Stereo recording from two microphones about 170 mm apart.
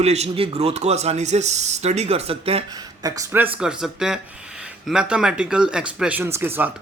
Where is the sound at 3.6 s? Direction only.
5° right (ahead or behind).